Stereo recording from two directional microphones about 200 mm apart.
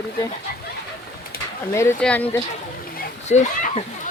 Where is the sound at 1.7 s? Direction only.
10° left (ahead or behind).